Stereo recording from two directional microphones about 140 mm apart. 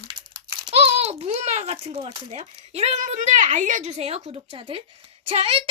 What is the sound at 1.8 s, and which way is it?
A child's voice, 50° right (ahead or behind).